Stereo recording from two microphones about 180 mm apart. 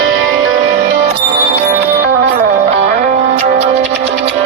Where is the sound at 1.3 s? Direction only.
40° right (ahead or behind).